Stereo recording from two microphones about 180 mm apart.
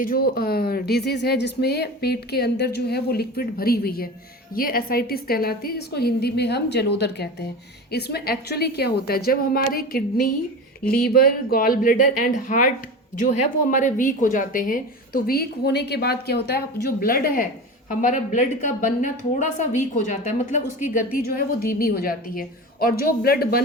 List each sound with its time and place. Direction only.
0.0 s a woman's voice: 55° left (ahead or behind)